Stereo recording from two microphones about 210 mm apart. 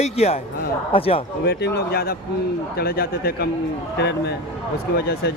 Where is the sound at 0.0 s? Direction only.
30° left (ahead or behind).